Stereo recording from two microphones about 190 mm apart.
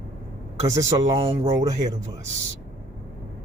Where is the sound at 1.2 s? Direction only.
30° right (ahead or behind).